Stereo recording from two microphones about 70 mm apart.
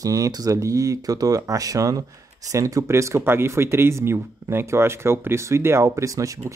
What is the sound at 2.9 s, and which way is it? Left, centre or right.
Speech, right.